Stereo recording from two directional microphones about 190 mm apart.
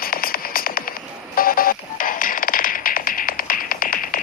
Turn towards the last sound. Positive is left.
turn(degrees=45)  # may be behind; listen again after turning